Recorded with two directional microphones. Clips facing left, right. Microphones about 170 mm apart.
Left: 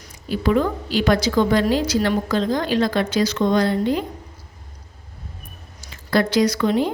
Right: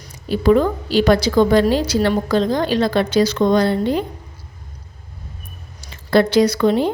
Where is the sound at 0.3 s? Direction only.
35° right (ahead or behind).